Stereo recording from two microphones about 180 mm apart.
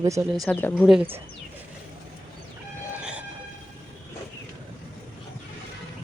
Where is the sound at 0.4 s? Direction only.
5° left (ahead or behind).